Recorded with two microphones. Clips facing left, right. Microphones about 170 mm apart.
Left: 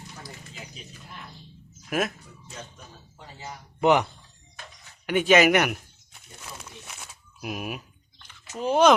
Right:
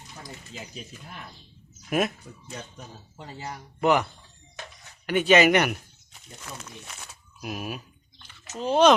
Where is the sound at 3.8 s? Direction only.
20° left (ahead or behind).